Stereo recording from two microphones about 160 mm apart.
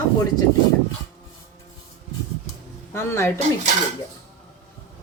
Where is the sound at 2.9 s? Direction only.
15° left (ahead or behind).